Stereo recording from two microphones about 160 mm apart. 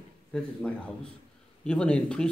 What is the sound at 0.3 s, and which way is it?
A man's voice, 5° left (ahead or behind).